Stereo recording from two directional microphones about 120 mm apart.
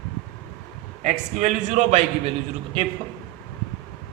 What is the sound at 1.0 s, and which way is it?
A man's voice, 90° right.